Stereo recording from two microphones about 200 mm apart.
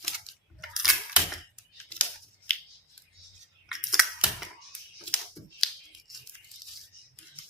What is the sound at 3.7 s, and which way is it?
Scissors, centre (ahead or behind).